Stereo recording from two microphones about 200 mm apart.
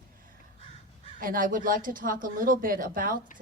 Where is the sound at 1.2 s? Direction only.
45° right (ahead or behind).